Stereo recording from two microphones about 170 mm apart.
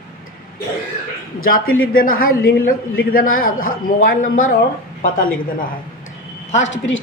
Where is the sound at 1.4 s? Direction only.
60° left (ahead or behind).